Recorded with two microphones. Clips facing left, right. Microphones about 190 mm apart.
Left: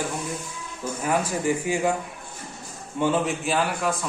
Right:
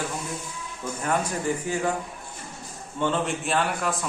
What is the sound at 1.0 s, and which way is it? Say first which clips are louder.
Speech: left 2 dB; 10° left (ahead or behind).